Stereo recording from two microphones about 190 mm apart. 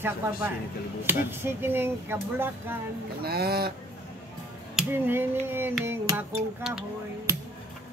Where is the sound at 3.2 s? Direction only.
55° right (ahead or behind).